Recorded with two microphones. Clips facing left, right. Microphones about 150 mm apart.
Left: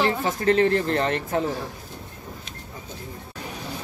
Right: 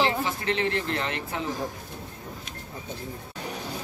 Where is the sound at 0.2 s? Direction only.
40° left (ahead or behind).